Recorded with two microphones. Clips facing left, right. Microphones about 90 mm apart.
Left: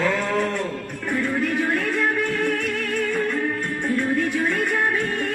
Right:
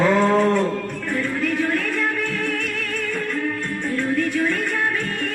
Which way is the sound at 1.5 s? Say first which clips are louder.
Even; 15° left (ahead or behind).